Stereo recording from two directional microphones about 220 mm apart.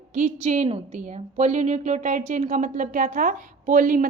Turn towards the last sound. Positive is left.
turn(degrees=-40)  # may be behind; listen again after turning